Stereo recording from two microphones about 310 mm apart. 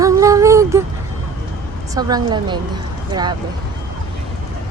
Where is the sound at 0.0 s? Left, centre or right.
Centre.